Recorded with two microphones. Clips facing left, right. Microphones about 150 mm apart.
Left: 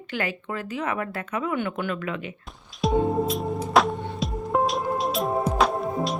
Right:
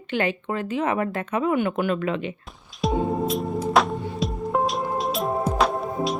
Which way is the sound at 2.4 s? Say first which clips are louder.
Even; centre (ahead or behind).